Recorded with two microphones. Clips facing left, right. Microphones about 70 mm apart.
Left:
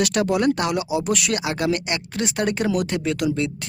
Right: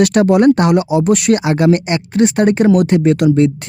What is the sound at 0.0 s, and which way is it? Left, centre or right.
Speech, right.